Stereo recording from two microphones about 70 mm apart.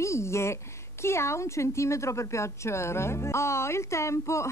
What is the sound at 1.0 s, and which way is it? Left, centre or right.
Speech, left.